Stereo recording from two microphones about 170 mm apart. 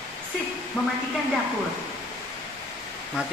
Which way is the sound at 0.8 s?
10° left (ahead or behind).